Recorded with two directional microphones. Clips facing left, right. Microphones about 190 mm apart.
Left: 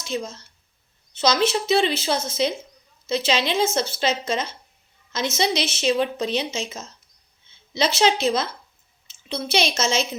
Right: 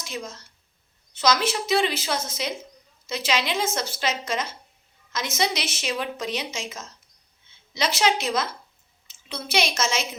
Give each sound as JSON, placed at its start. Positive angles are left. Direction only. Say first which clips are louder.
{"t": 0.0, "sound": "speech", "louder": "left 6 dB", "side_deg": 25}